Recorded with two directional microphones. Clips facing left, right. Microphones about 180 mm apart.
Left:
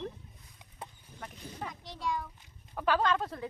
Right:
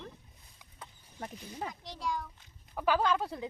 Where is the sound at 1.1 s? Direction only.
30° right (ahead or behind).